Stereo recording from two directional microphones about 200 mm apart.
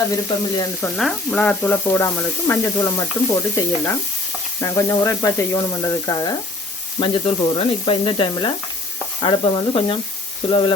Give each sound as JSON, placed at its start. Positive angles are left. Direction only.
{"t": 0.3, "sound": "sizzle", "side_deg": 20}
{"t": 0.9, "sound": "speech", "side_deg": 0}
{"t": 7.0, "sound": "sizzle", "side_deg": 25}